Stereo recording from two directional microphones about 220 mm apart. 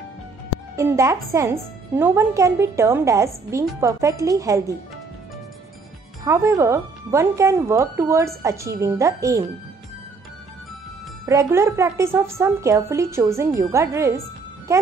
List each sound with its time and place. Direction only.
0.7 s speech: 15° right (ahead or behind)
6.2 s speech: 15° right (ahead or behind)
11.2 s speech: 15° right (ahead or behind)